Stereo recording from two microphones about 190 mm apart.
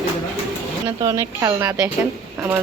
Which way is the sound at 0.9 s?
15° right (ahead or behind).